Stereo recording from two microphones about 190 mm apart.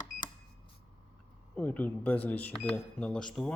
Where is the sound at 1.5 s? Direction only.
10° left (ahead or behind).